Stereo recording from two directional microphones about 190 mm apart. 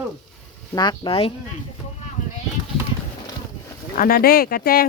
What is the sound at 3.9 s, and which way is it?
Speech, 55° left (ahead or behind).